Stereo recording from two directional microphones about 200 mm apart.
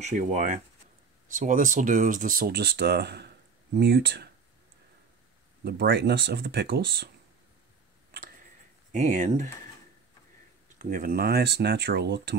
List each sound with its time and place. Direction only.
0.0 s speech: 35° right (ahead or behind); by 4.3 s 50° right (ahead or behind)
5.6 s speech: 50° right (ahead or behind)
8.9 s speech: 40° right (ahead or behind)
10.8 s speech: 45° right (ahead or behind)